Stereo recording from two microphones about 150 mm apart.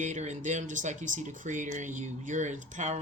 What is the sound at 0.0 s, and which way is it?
Speech, 50° right (ahead or behind).